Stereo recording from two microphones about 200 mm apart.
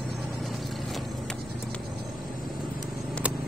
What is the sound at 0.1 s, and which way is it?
Vehicle, centre (ahead or behind).